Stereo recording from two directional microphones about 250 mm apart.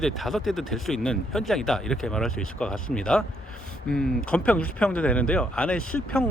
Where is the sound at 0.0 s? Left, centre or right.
Centre.